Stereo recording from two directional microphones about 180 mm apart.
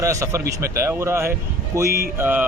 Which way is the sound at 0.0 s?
15° right (ahead or behind).